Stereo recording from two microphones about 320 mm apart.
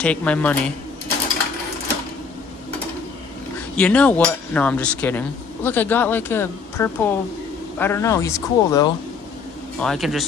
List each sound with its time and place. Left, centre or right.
0.0 s cutlery: centre
3.7 s cutlery: centre
7.8 s speech: centre
9.8 s cutlery: centre